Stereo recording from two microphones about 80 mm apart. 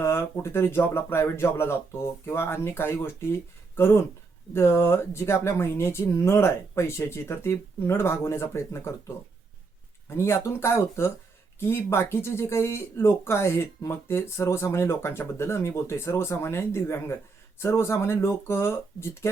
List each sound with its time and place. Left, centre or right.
0.0 s speech: left
10.1 s speech: left